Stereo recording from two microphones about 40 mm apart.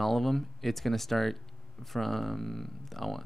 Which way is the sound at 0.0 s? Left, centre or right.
Centre.